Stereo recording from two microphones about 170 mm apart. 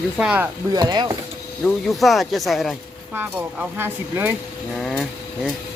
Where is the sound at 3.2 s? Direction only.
10° right (ahead or behind).